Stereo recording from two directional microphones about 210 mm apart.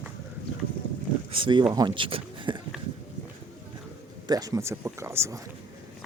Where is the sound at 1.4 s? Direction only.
25° right (ahead or behind).